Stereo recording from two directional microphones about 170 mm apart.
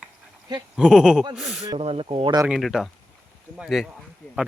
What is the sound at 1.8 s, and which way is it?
Speech, 35° right (ahead or behind).